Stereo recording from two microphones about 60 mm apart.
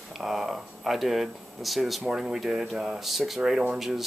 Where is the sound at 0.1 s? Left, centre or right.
Centre.